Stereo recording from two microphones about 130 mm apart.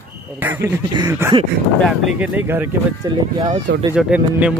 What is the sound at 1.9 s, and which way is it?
Speech, 5° right (ahead or behind).